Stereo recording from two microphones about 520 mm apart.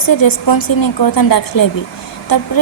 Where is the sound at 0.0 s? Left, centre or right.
Left.